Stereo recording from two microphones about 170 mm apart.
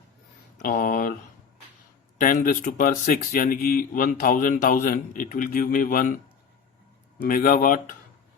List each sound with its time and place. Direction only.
0.6 s speech: 55° left (ahead or behind)
2.1 s speech: 55° left (ahead or behind)
7.2 s speech: 55° left (ahead or behind)